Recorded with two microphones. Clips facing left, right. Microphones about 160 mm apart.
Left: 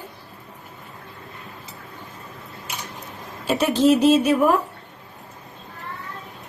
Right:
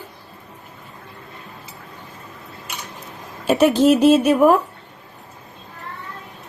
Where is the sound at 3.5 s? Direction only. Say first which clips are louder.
Right 3 dB; 50° right (ahead or behind).